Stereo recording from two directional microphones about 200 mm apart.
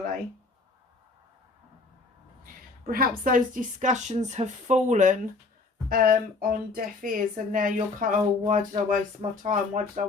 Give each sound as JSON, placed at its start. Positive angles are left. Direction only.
{"t": 2.8, "sound": "a woman's voice", "side_deg": -45}